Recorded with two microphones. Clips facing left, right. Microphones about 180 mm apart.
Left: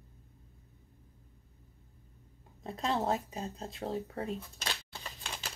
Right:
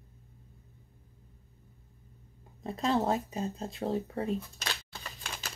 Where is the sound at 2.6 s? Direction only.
Centre (ahead or behind).